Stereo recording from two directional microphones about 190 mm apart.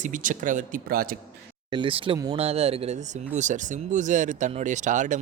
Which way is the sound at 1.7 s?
25° right (ahead or behind).